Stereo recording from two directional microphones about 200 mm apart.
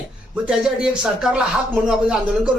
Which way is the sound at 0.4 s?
5° right (ahead or behind).